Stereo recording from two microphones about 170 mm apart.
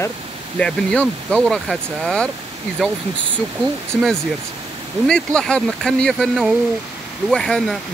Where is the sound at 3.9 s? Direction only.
Centre (ahead or behind).